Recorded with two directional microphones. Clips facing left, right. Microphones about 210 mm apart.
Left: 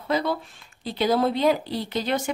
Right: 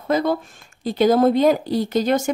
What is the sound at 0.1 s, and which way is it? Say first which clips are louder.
Speech: right 5 dB; 45° right (ahead or behind).